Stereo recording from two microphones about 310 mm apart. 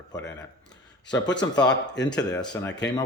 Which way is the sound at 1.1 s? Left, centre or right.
Left.